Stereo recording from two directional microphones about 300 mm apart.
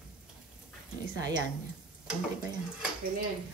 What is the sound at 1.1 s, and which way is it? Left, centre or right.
Speech, centre.